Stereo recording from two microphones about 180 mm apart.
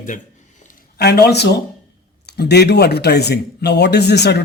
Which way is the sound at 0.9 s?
65° left (ahead or behind).